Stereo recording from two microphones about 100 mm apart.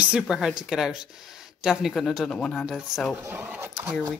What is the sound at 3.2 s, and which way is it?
Speech, 25° right (ahead or behind).